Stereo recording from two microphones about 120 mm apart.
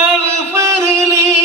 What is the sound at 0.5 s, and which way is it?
Music, 25° right (ahead or behind).